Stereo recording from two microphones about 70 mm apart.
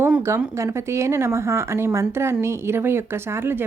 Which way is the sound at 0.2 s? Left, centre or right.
Right.